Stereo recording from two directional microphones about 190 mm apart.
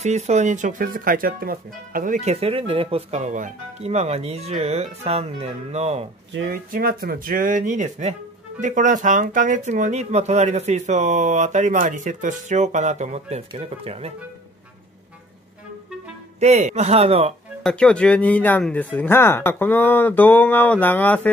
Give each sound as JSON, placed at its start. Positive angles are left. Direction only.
{"t": 0.0, "sound": "speech", "side_deg": -35}
{"t": 6.5, "sound": "speech", "side_deg": -50}
{"t": 16.3, "sound": "speech", "side_deg": -35}
{"t": 17.6, "sound": "speech", "side_deg": 5}